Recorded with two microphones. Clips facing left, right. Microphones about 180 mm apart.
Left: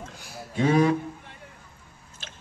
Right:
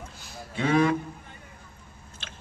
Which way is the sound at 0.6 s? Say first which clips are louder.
Left 2 dB; 35° left (ahead or behind).